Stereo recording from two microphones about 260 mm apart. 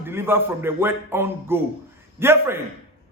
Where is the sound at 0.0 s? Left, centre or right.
Centre.